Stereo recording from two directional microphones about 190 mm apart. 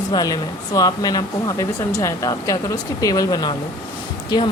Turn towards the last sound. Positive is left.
turn(degrees=20)  # may be behind; listen again after turning